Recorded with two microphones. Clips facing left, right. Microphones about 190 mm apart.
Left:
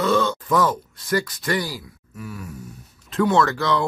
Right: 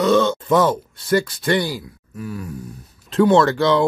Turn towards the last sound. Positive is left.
turn(degrees=-30)  # may be behind; listen again after turning